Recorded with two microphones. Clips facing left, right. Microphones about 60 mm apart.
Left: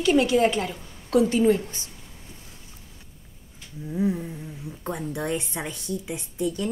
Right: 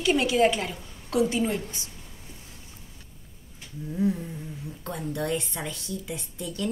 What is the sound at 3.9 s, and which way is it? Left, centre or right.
Speech, centre.